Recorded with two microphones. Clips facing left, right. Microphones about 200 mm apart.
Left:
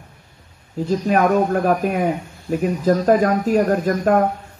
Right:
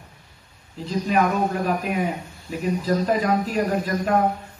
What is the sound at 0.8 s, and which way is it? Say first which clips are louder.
A man's voice: left 4 dB; 50° left (ahead or behind).